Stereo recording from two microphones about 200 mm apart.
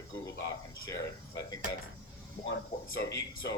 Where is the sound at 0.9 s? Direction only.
15° left (ahead or behind).